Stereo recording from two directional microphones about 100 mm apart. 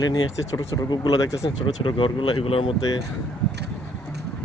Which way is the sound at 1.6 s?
55° left (ahead or behind).